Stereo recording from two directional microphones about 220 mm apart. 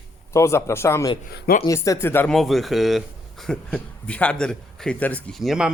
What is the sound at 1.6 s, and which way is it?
Speech, 15° left (ahead or behind).